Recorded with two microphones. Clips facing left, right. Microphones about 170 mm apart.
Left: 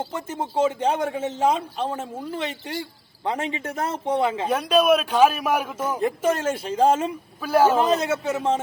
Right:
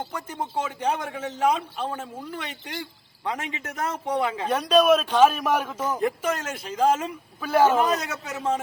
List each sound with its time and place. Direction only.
0.1 s a man's voice: 25° left (ahead or behind)
4.4 s a man's voice: 10° left (ahead or behind)
6.0 s a man's voice: 25° left (ahead or behind)
7.4 s a man's voice: 10° left (ahead or behind)
7.8 s a man's voice: 30° left (ahead or behind)